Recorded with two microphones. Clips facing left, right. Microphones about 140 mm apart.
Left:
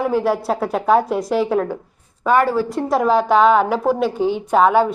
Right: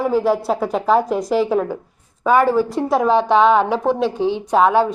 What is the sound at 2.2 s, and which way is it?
Speech, 15° right (ahead or behind).